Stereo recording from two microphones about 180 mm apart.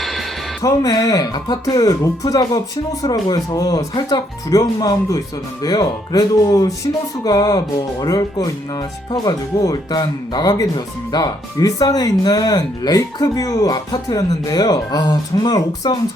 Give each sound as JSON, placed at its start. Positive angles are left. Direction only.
{"t": 0.0, "sound": "music", "side_deg": 0}
{"t": 0.6, "sound": "speech", "side_deg": 20}